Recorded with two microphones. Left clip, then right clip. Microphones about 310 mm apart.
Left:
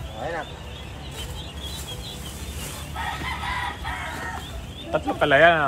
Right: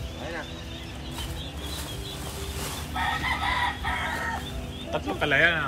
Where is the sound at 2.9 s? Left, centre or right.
Right.